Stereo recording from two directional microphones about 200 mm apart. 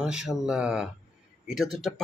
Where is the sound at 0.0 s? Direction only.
5° right (ahead or behind).